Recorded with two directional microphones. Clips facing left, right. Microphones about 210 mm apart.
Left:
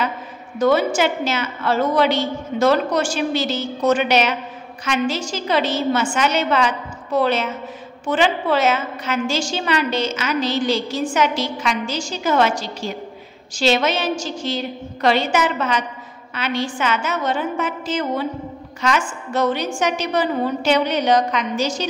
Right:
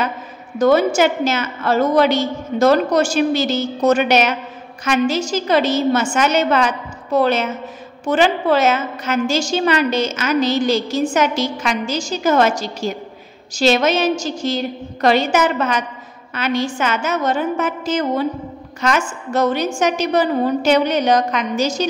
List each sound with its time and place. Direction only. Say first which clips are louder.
0.6 s a woman's voice: right 3 dB; 45° right (ahead or behind)